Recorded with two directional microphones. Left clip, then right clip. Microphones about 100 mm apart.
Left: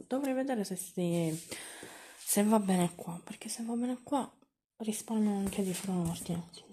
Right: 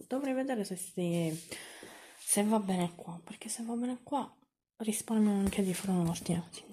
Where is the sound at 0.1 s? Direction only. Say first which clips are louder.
Left 1 dB; 10° left (ahead or behind); by 4.3 s 30° left (ahead or behind).